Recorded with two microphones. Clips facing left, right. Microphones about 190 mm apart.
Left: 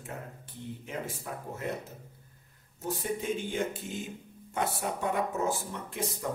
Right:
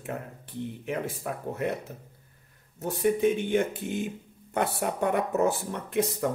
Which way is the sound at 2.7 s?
65° right (ahead or behind).